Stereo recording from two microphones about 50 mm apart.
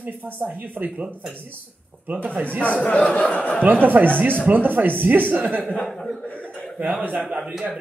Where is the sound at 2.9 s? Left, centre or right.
Left.